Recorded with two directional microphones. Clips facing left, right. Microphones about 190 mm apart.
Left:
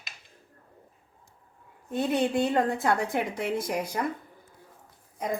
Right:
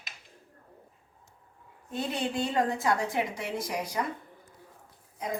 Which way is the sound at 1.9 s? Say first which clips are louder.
Left 6 dB; 55° left (ahead or behind).